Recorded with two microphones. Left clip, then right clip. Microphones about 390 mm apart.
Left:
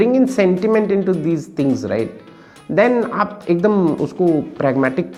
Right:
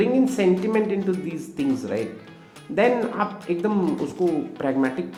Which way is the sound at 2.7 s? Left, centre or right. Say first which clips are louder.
Left 6 dB; left.